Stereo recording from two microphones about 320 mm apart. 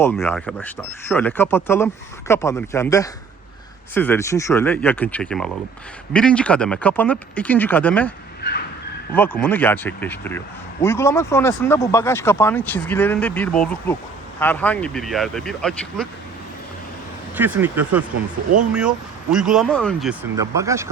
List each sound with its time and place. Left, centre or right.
0.0 s speech: centre
8.4 s vehicle: left
9.1 s speech: centre
17.3 s speech: centre